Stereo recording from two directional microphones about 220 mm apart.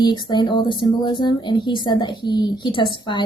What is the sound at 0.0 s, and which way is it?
Speech, 20° left (ahead or behind).